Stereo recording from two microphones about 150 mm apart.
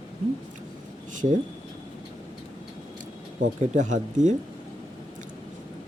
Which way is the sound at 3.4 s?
55° right (ahead or behind).